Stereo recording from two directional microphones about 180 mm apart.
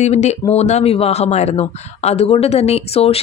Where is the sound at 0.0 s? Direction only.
40° left (ahead or behind).